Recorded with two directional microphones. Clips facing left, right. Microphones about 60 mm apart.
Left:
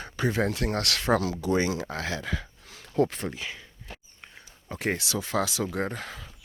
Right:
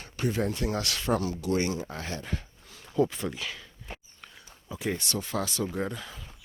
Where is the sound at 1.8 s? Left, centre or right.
Left.